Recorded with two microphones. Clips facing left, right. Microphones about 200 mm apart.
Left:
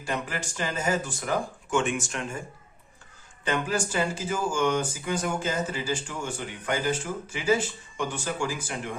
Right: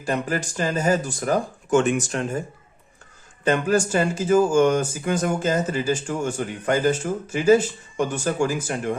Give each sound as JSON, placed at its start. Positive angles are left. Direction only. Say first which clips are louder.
{"t": 0.0, "sound": "speech", "louder": "right 7 dB", "side_deg": -40}
{"t": 3.4, "sound": "speech", "louder": "right 8 dB", "side_deg": -45}
{"t": 7.9, "sound": "speech", "louder": "right 8 dB", "side_deg": -45}